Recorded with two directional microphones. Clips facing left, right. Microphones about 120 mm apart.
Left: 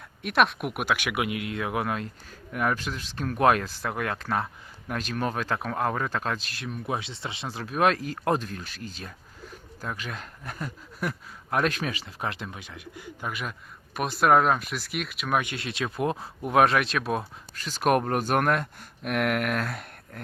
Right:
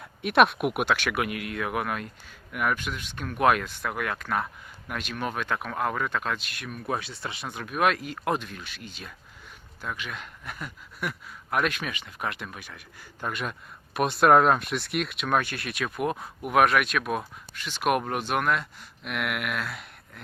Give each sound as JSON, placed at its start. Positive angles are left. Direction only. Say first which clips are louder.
{"t": 0.2, "sound": "speech", "louder": "right 3 dB", "side_deg": 0}
{"t": 0.9, "sound": "speech", "louder": "even", "side_deg": 15}
{"t": 13.2, "sound": "speech", "louder": "right 2 dB", "side_deg": 0}
{"t": 15.4, "sound": "speech", "louder": "even", "side_deg": 20}